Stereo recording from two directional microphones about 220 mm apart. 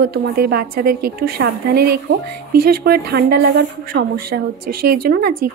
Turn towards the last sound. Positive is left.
turn(degrees=-45)  # may be behind; listen again after turning